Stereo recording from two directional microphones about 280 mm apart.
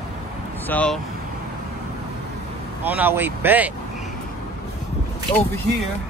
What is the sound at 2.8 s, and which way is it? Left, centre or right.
Speech, centre.